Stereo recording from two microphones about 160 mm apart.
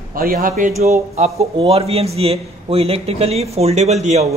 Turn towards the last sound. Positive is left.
turn(degrees=-45)  # may be behind; listen again after turning